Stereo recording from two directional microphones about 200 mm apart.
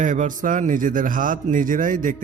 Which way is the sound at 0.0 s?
40° right (ahead or behind).